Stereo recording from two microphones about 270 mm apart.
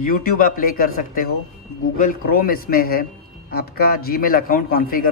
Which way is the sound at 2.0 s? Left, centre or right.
Left.